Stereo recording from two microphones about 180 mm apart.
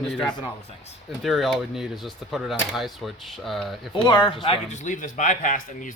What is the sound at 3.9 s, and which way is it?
Speech, 25° left (ahead or behind).